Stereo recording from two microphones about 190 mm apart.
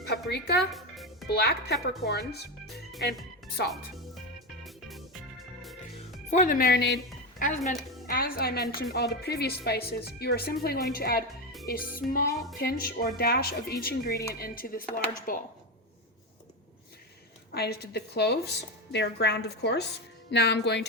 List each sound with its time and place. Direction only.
0.1 s a woman's voice: 60° left (ahead or behind)
0.7 s music: centre (ahead or behind)
1.3 s a woman's voice: 60° left (ahead or behind)
3.7 s speech: centre (ahead or behind)
4.6 s music: centre (ahead or behind)
6.3 s a woman's voice: 45° left (ahead or behind); by 7.4 s 60° left (ahead or behind)
7.4 s a woman's voice: 45° left (ahead or behind)
17.5 s a woman's voice: 55° left (ahead or behind)